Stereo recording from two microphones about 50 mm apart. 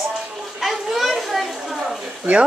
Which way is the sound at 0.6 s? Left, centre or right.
Centre.